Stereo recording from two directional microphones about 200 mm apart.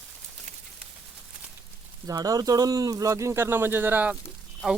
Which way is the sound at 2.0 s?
20° right (ahead or behind).